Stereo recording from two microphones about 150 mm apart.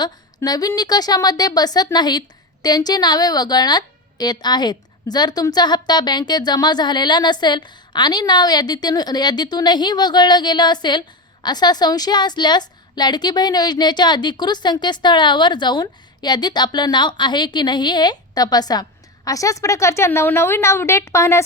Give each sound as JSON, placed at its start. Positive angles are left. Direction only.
{"t": 0.0, "sound": "a woman's voice", "side_deg": 25}